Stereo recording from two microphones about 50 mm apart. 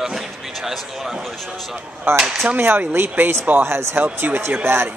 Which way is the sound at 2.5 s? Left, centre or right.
Right.